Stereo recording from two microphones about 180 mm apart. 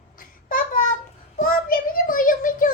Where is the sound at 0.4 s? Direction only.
50° left (ahead or behind).